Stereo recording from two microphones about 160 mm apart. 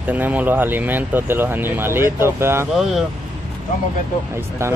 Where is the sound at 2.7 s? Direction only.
Centre (ahead or behind).